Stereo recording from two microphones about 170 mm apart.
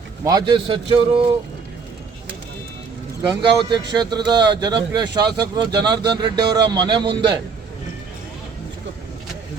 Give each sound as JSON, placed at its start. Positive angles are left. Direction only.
{"t": 0.3, "sound": "a man's voice", "side_deg": -25}
{"t": 3.2, "sound": "speech", "side_deg": -25}